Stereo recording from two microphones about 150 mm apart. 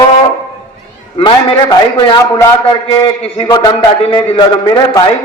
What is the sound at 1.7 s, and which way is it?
A man's voice, 30° left (ahead or behind).